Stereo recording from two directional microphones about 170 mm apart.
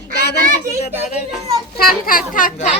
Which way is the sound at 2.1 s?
55° left (ahead or behind).